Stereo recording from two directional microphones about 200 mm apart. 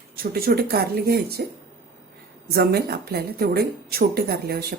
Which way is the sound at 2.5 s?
50° right (ahead or behind).